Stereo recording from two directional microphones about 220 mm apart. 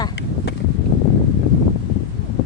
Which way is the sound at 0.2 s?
55° left (ahead or behind).